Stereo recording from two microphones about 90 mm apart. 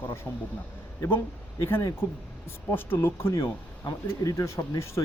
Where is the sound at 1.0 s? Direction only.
25° left (ahead or behind).